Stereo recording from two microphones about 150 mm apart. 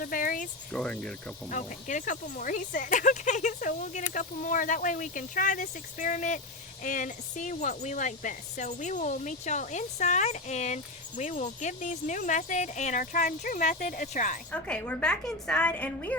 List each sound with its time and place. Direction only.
0.0 s speech: 70° left (ahead or behind)
0.7 s speech: 5° left (ahead or behind)
1.5 s speech: 55° left (ahead or behind)
14.5 s a woman's voice: 10° left (ahead or behind)